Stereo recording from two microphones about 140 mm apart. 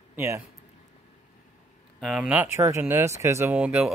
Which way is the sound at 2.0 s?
5° right (ahead or behind).